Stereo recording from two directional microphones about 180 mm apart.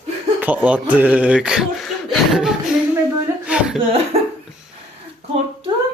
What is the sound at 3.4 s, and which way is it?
Chuckle, 5° right (ahead or behind).